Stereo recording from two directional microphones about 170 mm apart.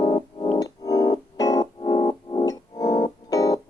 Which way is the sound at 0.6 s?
20° left (ahead or behind).